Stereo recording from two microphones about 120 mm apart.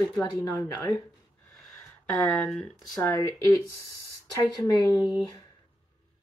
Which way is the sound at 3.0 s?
20° left (ahead or behind).